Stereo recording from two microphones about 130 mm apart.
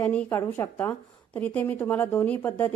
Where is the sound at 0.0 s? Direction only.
10° left (ahead or behind).